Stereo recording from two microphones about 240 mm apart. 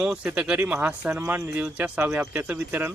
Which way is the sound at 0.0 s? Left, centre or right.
Centre.